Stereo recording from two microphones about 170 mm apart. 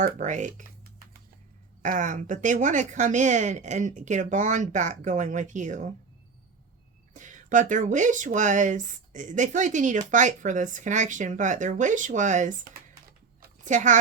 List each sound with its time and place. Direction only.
0.0 s speech: 45° right (ahead or behind)
1.8 s speech: 45° right (ahead or behind)
7.1 s speech: 45° right (ahead or behind)